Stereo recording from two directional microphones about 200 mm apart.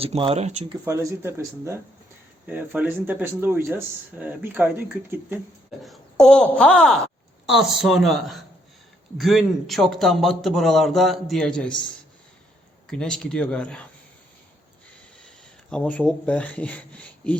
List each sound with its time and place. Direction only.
0.0 s speech: 30° right (ahead or behind)
0.9 s speech: 15° right (ahead or behind)
5.8 s speech: centre (ahead or behind)
12.9 s speech: 5° left (ahead or behind)
15.7 s speech: 5° left (ahead or behind)